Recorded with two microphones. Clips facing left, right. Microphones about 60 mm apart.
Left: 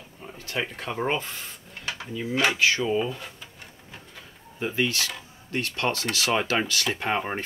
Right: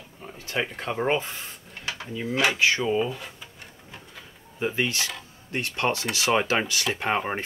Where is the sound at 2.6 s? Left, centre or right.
Centre.